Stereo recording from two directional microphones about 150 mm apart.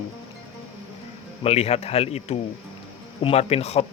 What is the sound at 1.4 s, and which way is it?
Speech, 40° left (ahead or behind).